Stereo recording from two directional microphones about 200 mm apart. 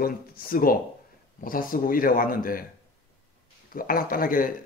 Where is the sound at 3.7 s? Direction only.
45° left (ahead or behind).